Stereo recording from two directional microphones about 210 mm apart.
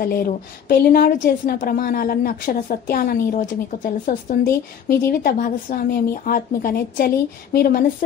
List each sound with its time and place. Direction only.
0.0 s a woman's voice: 45° left (ahead or behind)